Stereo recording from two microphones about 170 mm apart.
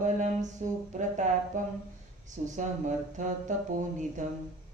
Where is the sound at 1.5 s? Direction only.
45° right (ahead or behind).